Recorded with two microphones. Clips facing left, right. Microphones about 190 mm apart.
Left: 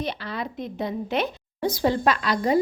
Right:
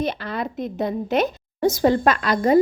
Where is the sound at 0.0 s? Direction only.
50° right (ahead or behind).